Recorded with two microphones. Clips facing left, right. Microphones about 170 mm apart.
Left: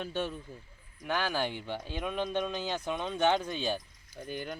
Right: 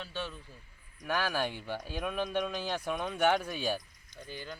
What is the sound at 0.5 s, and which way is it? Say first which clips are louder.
Speech: left 7 dB; 20° left (ahead or behind).